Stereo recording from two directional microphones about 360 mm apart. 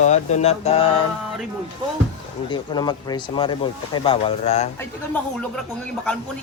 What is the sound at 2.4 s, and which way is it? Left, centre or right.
Speech, centre.